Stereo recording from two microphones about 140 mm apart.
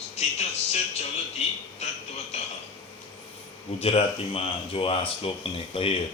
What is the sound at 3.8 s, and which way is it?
Speech, 45° left (ahead or behind).